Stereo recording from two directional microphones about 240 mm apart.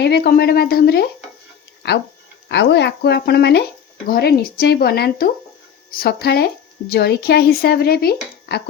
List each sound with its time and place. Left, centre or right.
0.0 s speech: left
2.5 s speech: left